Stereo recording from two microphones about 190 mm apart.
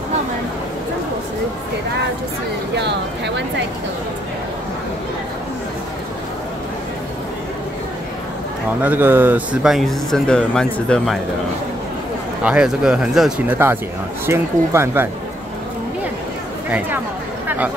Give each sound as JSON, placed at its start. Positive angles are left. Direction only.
{"t": 2.7, "sound": "speech", "side_deg": -65}
{"t": 8.8, "sound": "speech", "side_deg": -10}
{"t": 12.4, "sound": "speech", "side_deg": -5}